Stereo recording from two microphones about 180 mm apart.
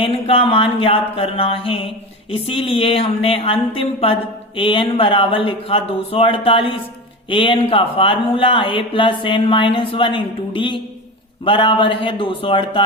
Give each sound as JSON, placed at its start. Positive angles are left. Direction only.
{"t": 0.0, "sound": "speech", "side_deg": 30}